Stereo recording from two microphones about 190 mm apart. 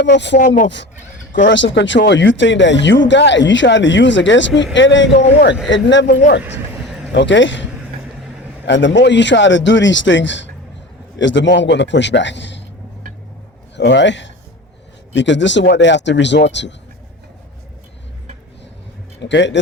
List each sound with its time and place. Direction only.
0.0 s speech: 65° left (ahead or behind)
0.3 s speech: 45° left (ahead or behind)
1.5 s speech: 75° left (ahead or behind)
13.7 s speech: 65° left (ahead or behind)
19.2 s speech: 70° left (ahead or behind)